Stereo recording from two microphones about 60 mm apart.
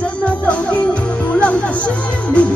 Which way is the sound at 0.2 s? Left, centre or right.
Left.